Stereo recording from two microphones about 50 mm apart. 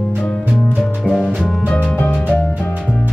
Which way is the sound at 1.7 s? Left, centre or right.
Left.